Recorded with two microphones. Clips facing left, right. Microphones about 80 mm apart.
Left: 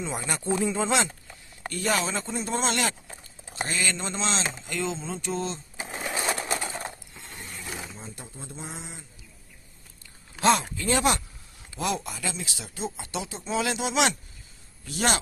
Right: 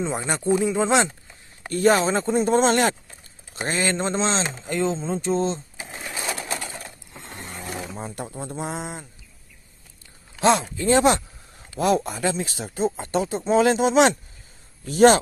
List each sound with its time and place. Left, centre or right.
0.0 s speech: right
1.7 s speech: right
5.9 s sewing machine: centre
6.2 s pigeon: left
7.2 s a sound: right
7.9 s a sound: right
10.8 s speech: right
11.8 s speech: right